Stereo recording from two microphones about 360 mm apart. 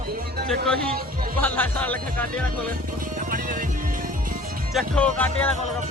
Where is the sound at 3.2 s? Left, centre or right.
Right.